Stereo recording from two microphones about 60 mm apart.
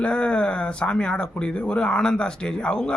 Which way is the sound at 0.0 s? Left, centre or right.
Centre.